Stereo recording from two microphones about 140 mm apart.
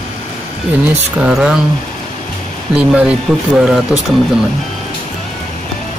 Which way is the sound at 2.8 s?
5° right (ahead or behind).